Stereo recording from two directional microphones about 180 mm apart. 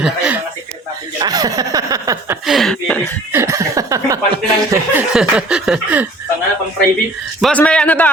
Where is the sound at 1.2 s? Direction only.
20° right (ahead or behind).